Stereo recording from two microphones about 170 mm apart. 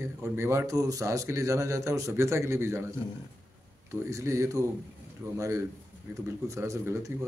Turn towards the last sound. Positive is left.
turn(degrees=-15)  # may be behind; listen again after turning